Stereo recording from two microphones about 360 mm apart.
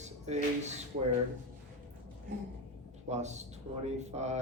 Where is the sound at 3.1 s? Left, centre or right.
Centre.